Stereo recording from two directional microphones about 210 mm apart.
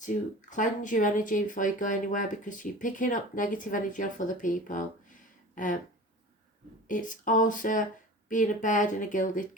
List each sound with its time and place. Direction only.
0.0 s speech: 35° left (ahead or behind)
6.8 s speech: 40° left (ahead or behind)